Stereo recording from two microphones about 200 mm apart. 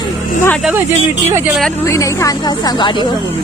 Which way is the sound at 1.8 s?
15° left (ahead or behind).